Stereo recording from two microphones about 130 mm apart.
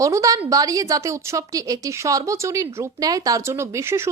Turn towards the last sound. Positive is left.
turn(degrees=-20)  # may be behind; listen again after turning